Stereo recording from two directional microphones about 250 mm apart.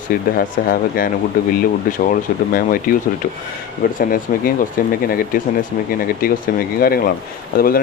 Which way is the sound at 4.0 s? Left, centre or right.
Left.